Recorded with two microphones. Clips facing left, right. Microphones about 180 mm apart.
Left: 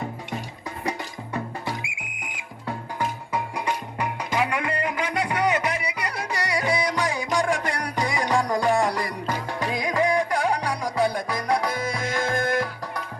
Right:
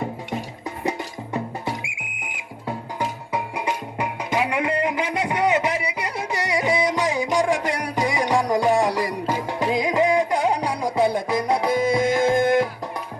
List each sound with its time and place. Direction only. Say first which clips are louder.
0.9 s music: right 3 dB; 20° right (ahead or behind)
3.0 s music: even; 20° right (ahead or behind)